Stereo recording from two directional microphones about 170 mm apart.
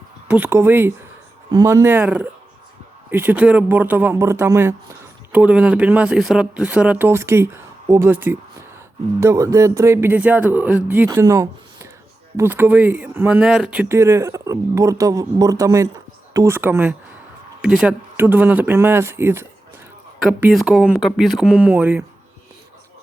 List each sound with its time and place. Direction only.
0.3 s speech: 10° right (ahead or behind)
20.4 s speech: centre (ahead or behind)